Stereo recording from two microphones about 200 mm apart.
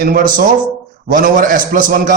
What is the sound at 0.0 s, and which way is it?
A man's voice, 45° right (ahead or behind).